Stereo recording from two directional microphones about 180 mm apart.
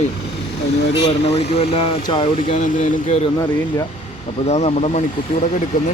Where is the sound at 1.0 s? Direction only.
35° left (ahead or behind).